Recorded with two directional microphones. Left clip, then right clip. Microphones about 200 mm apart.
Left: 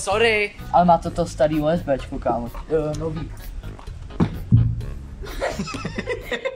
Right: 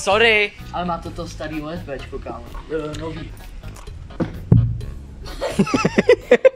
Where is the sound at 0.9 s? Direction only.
60° left (ahead or behind).